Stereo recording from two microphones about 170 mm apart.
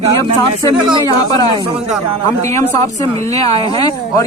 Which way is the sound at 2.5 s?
15° left (ahead or behind).